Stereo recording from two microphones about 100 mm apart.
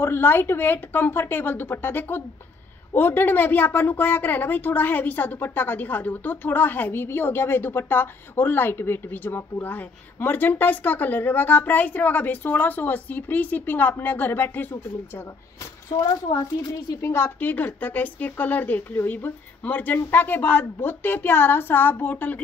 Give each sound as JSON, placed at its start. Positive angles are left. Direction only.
{"t": 0.0, "sound": "a woman's voice", "side_deg": 25}
{"t": 15.9, "sound": "a woman's voice", "side_deg": 40}
{"t": 16.9, "sound": "a woman's voice", "side_deg": 30}